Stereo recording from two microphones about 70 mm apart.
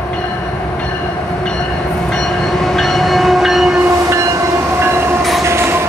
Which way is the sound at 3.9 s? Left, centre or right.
Right.